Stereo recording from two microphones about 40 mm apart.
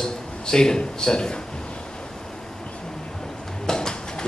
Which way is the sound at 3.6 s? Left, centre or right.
Centre.